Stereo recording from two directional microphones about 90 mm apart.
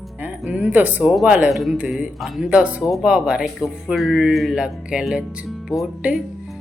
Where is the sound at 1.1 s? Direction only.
10° right (ahead or behind).